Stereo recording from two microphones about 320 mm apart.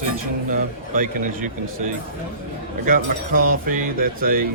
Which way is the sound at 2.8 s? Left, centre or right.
Right.